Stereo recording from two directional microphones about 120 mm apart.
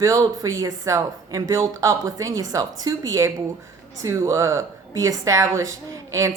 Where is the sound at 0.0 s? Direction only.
25° right (ahead or behind).